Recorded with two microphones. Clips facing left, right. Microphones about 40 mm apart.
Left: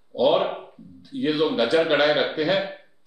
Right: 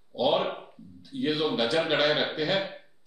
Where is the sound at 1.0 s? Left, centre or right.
Centre.